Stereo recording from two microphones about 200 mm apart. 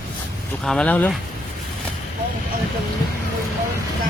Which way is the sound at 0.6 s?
5° left (ahead or behind).